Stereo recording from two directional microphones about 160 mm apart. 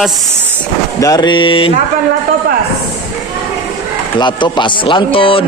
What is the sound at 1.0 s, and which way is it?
Speech, 25° left (ahead or behind).